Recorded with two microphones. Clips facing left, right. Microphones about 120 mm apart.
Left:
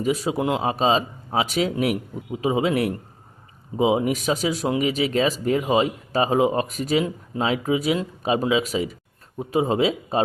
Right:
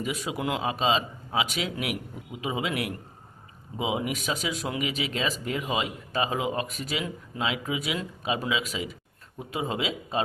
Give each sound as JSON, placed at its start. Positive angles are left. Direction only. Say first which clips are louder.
{"t": 0.0, "sound": "speech", "louder": "left 8 dB", "side_deg": 35}